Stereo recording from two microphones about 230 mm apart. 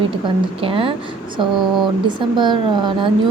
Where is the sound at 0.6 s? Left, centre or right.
Right.